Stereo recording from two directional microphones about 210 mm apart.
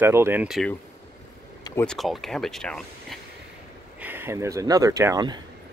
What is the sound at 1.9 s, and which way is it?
Speech, centre (ahead or behind).